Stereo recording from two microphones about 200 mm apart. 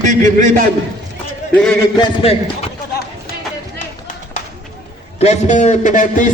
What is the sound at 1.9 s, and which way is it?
Speech, 30° left (ahead or behind).